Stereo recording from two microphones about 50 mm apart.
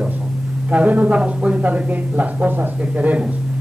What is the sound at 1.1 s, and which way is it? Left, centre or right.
A man's voice, centre.